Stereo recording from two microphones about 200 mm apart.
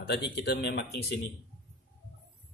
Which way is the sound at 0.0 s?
55° left (ahead or behind).